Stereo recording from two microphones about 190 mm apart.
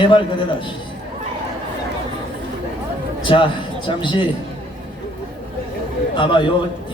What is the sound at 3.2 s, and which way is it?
A man's voice, 25° left (ahead or behind).